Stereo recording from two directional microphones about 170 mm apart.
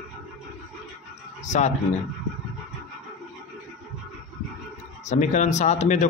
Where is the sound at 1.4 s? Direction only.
45° left (ahead or behind).